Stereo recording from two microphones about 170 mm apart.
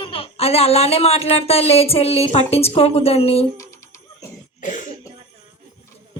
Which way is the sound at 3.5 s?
15° left (ahead or behind).